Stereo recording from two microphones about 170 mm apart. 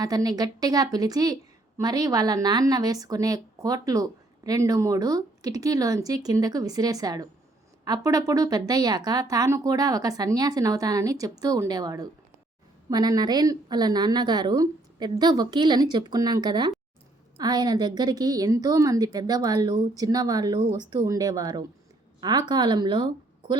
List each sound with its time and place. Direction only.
0.0 s a woman's voice: 20° right (ahead or behind)